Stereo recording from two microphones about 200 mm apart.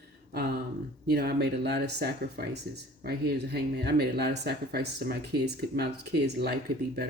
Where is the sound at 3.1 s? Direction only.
55° right (ahead or behind).